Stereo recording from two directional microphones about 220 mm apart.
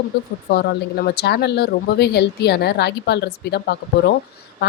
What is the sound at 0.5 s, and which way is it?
Speech, 45° left (ahead or behind).